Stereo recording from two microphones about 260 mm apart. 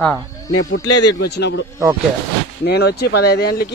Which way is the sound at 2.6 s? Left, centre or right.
Left.